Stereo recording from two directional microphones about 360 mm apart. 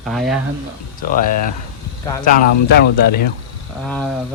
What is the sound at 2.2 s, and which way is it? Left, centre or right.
Speech, left.